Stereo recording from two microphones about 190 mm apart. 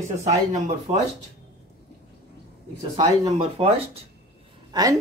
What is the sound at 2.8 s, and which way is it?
Speech, 20° right (ahead or behind).